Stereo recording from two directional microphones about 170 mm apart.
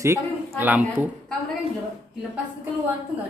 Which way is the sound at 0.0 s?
15° right (ahead or behind).